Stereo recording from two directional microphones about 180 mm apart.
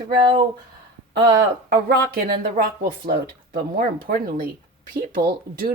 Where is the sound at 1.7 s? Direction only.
60° right (ahead or behind).